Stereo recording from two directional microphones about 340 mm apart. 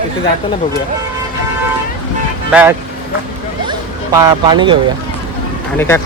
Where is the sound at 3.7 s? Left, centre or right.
Centre.